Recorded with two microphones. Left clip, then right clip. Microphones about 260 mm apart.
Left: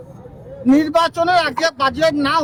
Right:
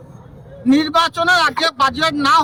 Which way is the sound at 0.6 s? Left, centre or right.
Centre.